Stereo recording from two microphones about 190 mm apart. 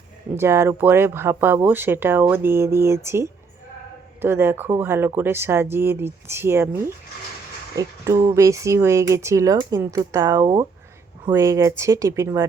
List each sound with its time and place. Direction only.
0.3 s speech: 15° right (ahead or behind)